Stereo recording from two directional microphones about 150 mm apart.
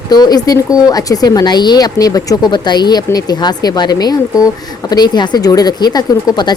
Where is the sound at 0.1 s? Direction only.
25° left (ahead or behind).